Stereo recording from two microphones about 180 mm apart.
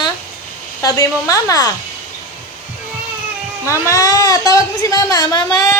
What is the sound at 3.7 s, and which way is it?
A woman's voice, 15° left (ahead or behind).